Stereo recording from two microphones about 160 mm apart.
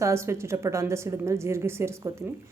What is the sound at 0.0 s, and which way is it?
A woman's voice, 15° right (ahead or behind).